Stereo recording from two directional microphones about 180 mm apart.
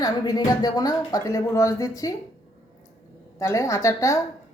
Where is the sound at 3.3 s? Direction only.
15° left (ahead or behind).